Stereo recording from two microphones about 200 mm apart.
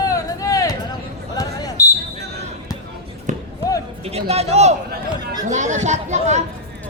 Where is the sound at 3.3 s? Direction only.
35° right (ahead or behind).